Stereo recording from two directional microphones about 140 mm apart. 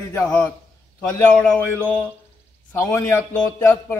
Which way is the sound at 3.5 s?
20° left (ahead or behind).